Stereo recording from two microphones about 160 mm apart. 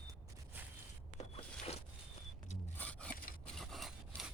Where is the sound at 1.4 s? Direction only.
40° left (ahead or behind).